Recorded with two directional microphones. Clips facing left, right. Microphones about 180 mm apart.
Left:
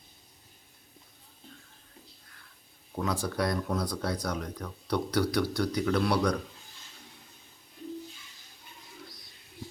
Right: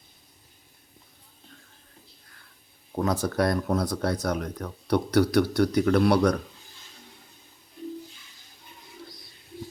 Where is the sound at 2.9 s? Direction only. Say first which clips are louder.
Right 5 dB; 40° right (ahead or behind).